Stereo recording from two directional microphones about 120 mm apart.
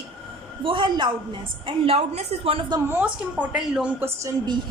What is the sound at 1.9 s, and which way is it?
Speech, 60° right (ahead or behind).